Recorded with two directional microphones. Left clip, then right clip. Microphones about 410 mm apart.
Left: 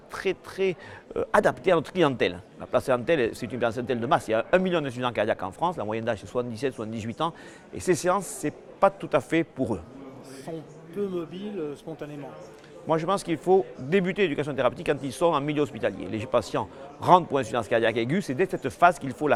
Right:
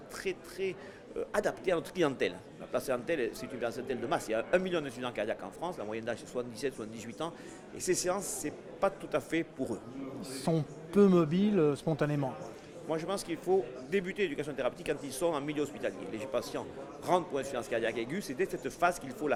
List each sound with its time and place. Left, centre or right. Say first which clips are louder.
0.1 s a man's voice: left 9 dB; left
10.4 s speech: right 5 dB; right
12.9 s a man's voice: left 10 dB; left